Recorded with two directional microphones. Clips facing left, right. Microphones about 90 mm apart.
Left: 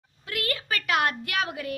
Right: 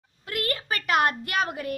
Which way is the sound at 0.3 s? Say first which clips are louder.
Right 1 dB; 40° right (ahead or behind).